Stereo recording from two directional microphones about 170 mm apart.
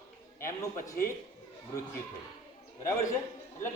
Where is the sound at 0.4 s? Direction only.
15° left (ahead or behind).